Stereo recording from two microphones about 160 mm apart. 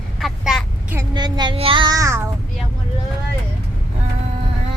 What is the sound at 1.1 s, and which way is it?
Child singing, 25° right (ahead or behind).